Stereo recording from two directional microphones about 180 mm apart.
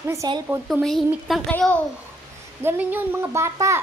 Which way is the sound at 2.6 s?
10° right (ahead or behind).